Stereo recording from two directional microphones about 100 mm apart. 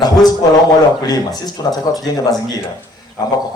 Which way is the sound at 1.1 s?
40° left (ahead or behind).